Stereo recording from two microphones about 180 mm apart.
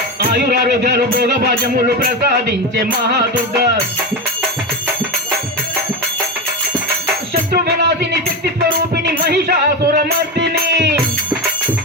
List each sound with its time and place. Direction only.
0.3 s speech: 60° right (ahead or behind)
7.5 s music: 60° right (ahead or behind)
9.2 s music: 60° right (ahead or behind)